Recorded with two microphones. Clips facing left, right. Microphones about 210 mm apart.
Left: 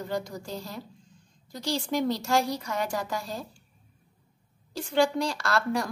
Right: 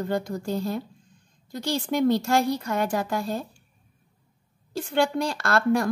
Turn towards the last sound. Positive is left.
turn(degrees=-55)  # may be behind; listen again after turning